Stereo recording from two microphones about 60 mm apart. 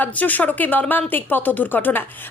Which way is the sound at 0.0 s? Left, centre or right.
Left.